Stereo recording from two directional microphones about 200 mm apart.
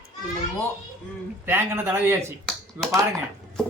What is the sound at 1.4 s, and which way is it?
Speech, 10° right (ahead or behind).